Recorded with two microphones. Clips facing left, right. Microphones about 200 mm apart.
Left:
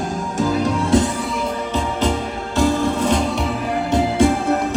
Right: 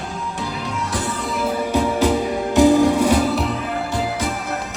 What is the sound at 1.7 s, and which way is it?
Music, 10° right (ahead or behind).